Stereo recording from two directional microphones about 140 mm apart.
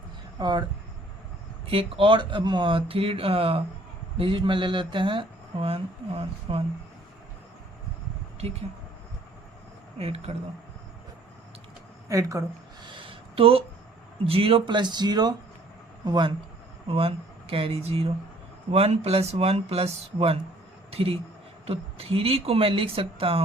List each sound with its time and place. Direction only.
0.3 s speech: 30° right (ahead or behind)
1.6 s speech: 45° right (ahead or behind)
10.0 s speech: 45° right (ahead or behind)
12.0 s speech: 20° right (ahead or behind)
12.9 s a sound: 35° right (ahead or behind)
14.3 s speech: 40° right (ahead or behind)